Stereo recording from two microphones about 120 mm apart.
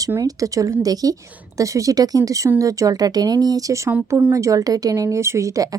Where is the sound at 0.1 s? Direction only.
30° right (ahead or behind).